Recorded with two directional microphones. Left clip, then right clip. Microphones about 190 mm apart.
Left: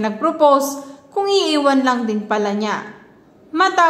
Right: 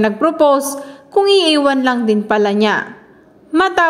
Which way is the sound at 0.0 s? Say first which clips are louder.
Right 2 dB; 35° right (ahead or behind).